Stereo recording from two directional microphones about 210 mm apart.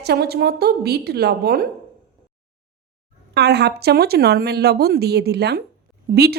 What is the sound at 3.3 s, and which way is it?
Speech, 50° right (ahead or behind).